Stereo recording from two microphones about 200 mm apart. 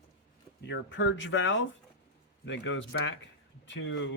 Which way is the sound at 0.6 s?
60° left (ahead or behind).